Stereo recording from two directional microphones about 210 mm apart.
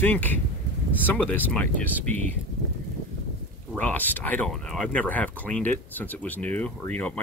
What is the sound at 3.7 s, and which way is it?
Speech, 10° left (ahead or behind).